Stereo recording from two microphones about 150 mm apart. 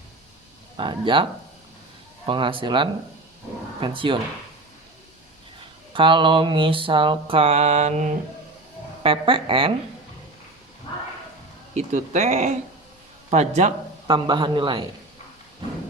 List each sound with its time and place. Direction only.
0.8 s mantra: 35° right (ahead or behind)
5.9 s mantra: 35° right (ahead or behind); by 8.1 s 50° right (ahead or behind)
9.0 s mantra: 35° right (ahead or behind)
11.7 s speech: 55° right (ahead or behind)
14.1 s mantra: 30° right (ahead or behind)